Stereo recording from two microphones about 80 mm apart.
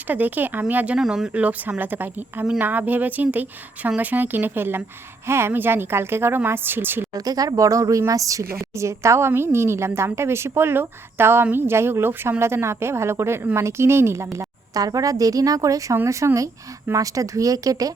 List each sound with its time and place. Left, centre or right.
0.1 s speech: right
0.9 s speech: centre
1.3 s speech: centre
7.3 s a woman's voice: right
14.7 s a woman's voice: right